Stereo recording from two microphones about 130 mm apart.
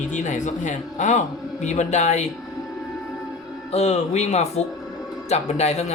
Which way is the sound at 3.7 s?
55° left (ahead or behind).